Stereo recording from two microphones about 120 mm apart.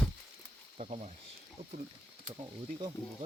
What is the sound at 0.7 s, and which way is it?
Speech, 65° right (ahead or behind).